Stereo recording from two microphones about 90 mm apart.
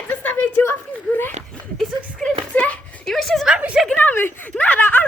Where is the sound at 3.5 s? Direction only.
10° right (ahead or behind).